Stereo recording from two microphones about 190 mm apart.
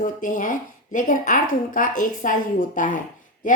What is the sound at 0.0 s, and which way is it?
Speech, 45° left (ahead or behind).